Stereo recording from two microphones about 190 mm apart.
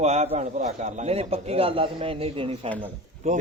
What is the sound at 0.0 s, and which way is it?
Speech, 35° right (ahead or behind).